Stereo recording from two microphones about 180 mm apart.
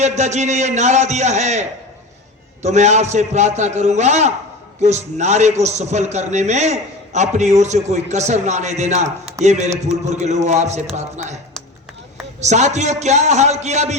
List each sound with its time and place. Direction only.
0.0 s a man's voice: 40° right (ahead or behind)
12.4 s a man's voice: 40° right (ahead or behind)